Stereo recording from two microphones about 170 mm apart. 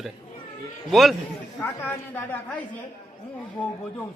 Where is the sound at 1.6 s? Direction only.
15° left (ahead or behind).